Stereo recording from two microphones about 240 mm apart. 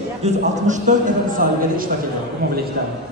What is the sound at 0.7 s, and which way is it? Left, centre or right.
Speech, right.